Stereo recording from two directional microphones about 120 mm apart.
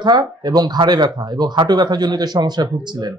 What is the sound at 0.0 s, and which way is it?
Speech, 35° right (ahead or behind).